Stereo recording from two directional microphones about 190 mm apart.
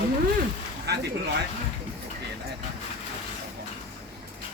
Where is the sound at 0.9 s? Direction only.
60° right (ahead or behind).